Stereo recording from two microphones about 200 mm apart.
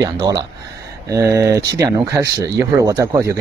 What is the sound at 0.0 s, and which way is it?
Speech, 20° right (ahead or behind).